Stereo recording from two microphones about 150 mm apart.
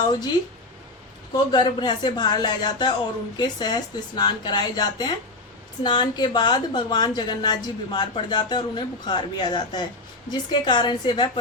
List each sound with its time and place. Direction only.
0.1 s a woman's voice: 25° left (ahead or behind)